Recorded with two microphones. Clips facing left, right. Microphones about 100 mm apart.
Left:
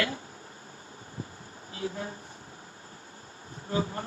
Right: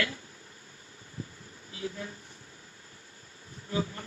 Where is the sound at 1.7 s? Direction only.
40° left (ahead or behind).